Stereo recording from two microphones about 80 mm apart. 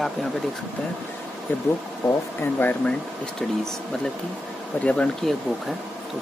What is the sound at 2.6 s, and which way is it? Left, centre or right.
Speech, left.